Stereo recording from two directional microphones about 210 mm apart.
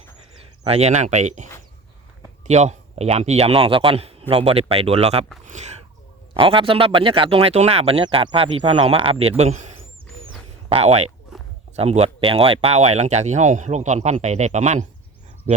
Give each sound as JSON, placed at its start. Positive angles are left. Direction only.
{"t": 0.3, "sound": "speech", "side_deg": -30}
{"t": 2.5, "sound": "speech", "side_deg": -30}